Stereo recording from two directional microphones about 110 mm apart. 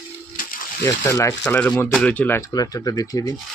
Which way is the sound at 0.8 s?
25° left (ahead or behind).